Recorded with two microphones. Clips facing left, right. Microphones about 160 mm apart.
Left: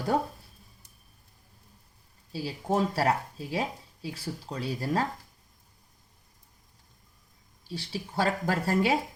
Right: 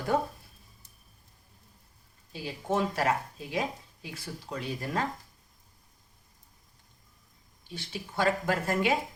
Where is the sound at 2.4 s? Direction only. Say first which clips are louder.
Left 2 dB; 35° left (ahead or behind).